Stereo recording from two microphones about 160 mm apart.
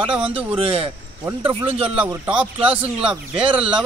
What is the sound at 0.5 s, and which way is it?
Speech, 35° right (ahead or behind).